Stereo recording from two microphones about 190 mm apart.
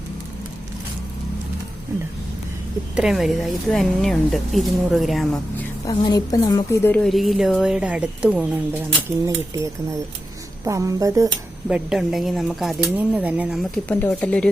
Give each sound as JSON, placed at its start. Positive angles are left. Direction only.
{"t": 2.9, "sound": "speech", "side_deg": -5}
{"t": 5.8, "sound": "speech", "side_deg": 20}
{"t": 10.7, "sound": "speech", "side_deg": -15}
{"t": 11.7, "sound": "speech", "side_deg": -5}